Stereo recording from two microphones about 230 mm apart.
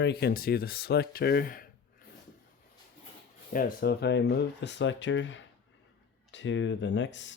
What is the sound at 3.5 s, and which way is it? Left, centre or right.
Speech, left.